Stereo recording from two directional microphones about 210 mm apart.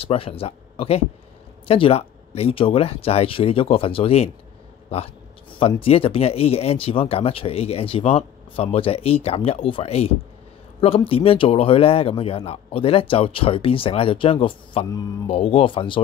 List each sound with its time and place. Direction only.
0.0 s a man's voice: 25° left (ahead or behind)
4.8 s a sound: 30° left (ahead or behind)
5.8 s a man's voice: 25° left (ahead or behind)